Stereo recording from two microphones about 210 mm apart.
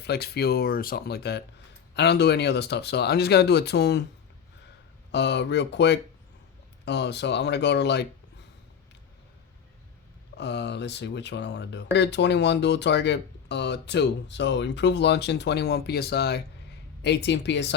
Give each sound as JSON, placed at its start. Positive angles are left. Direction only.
{"t": 0.0, "sound": "speech", "side_deg": 50}
{"t": 5.1, "sound": "speech", "side_deg": 55}
{"t": 10.3, "sound": "speech", "side_deg": 55}